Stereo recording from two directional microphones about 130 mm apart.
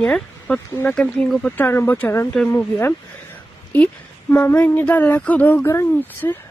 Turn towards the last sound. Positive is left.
turn(degrees=20)  # may be behind; listen again after turning